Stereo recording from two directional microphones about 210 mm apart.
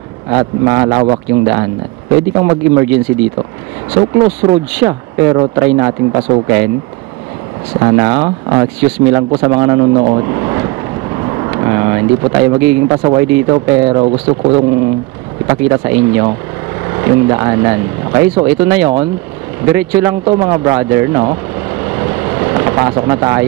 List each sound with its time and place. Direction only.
0.3 s speech: 20° right (ahead or behind)
4.0 s speech: 30° right (ahead or behind)
4.8 s speech: 15° right (ahead or behind)
7.8 s speech: 20° right (ahead or behind)
20.2 s speech: 25° right (ahead or behind)
22.2 s vehicle: 20° right (ahead or behind)